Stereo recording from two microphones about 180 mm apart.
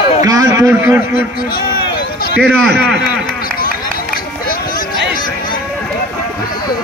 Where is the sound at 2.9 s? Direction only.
60° left (ahead or behind).